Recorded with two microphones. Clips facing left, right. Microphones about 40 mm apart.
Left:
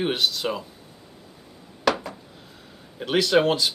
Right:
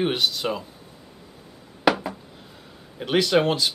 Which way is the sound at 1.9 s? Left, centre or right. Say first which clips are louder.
Right 2 dB; centre.